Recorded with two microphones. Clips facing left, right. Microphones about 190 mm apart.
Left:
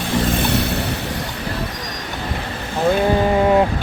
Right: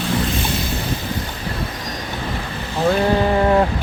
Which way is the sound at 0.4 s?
65° left (ahead or behind).